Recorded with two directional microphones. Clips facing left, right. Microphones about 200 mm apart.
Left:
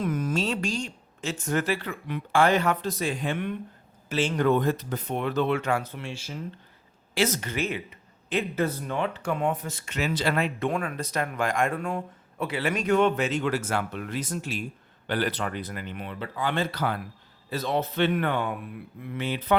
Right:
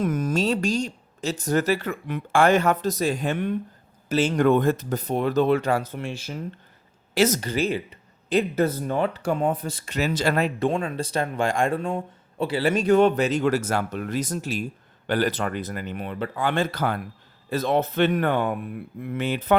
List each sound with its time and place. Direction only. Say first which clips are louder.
0.0 s speech: right 4 dB; 45° right (ahead or behind)
10.7 s speech: right 4 dB; 25° right (ahead or behind); by 19.5 s 50° right (ahead or behind)